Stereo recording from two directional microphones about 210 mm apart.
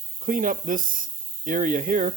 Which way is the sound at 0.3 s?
40° right (ahead or behind).